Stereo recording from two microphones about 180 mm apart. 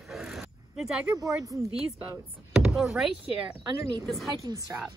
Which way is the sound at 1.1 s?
20° right (ahead or behind).